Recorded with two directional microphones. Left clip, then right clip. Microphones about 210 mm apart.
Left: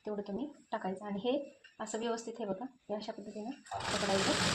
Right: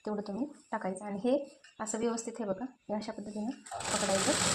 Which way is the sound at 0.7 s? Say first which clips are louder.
Right 1 dB; 35° right (ahead or behind).